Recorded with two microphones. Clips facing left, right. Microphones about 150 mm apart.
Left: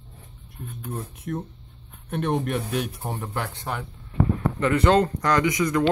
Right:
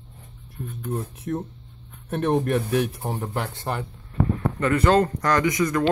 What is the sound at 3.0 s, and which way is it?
Speech, 25° right (ahead or behind).